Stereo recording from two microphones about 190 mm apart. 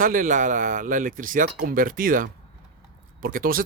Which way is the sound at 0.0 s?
45° right (ahead or behind).